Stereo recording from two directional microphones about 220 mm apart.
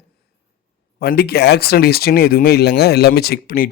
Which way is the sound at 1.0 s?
45° left (ahead or behind).